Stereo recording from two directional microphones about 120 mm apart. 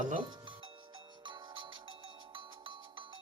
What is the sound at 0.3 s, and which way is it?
Music, 40° right (ahead or behind).